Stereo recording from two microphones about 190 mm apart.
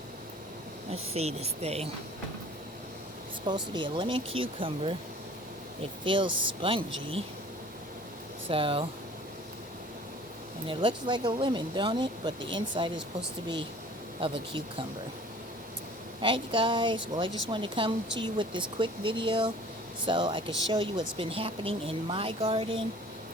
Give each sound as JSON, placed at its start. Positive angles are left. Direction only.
{"t": 0.9, "sound": "speech", "side_deg": -35}
{"t": 3.4, "sound": "speech", "side_deg": -25}
{"t": 6.1, "sound": "speech", "side_deg": -25}
{"t": 8.4, "sound": "speech", "side_deg": -30}
{"t": 10.7, "sound": "speech", "side_deg": -25}
{"t": 14.2, "sound": "speech", "side_deg": -30}
{"t": 16.2, "sound": "speech", "side_deg": -25}